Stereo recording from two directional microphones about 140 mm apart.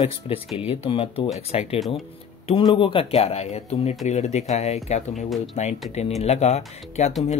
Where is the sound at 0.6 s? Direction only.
40° left (ahead or behind).